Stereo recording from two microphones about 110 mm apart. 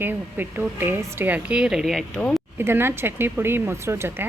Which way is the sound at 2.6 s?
20° right (ahead or behind).